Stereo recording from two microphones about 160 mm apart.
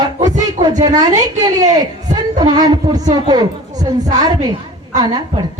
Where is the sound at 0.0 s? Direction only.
25° right (ahead or behind).